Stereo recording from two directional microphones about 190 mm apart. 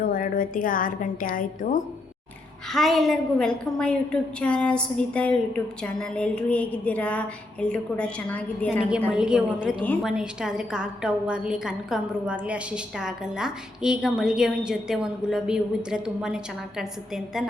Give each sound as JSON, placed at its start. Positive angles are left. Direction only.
{"t": 0.0, "sound": "a woman's voice", "side_deg": 45}
{"t": 2.6, "sound": "a woman's voice", "side_deg": 0}
{"t": 9.0, "sound": "a woman's voice", "side_deg": -5}